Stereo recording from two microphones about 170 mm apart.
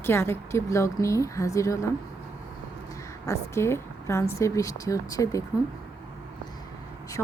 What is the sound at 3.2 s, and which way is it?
A woman's voice, 15° left (ahead or behind).